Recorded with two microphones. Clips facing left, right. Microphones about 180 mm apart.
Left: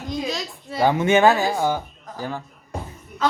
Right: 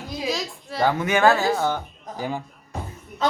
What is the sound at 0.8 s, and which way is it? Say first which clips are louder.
Speech: left 3 dB; 20° left (ahead or behind).